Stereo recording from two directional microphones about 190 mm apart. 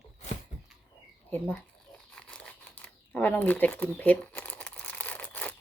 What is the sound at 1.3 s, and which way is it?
Speech, 10° left (ahead or behind).